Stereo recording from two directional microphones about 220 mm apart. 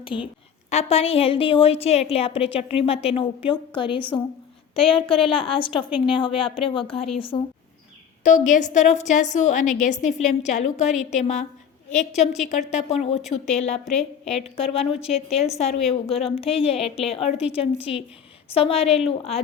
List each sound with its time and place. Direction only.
0.0 s a woman's voice: 20° left (ahead or behind)
8.2 s a woman's voice: 35° left (ahead or behind)
13.8 s a woman's voice: centre (ahead or behind)
14.5 s a woman's voice: 25° left (ahead or behind)
14.9 s a woman's voice: 5° right (ahead or behind)
15.4 s a woman's voice: 30° left (ahead or behind)